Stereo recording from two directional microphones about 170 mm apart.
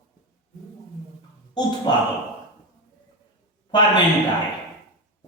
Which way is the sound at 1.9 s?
25° left (ahead or behind).